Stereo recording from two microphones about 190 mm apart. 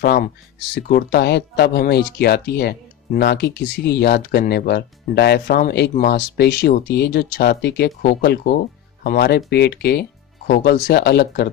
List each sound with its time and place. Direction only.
0.0 s speech: 55° left (ahead or behind)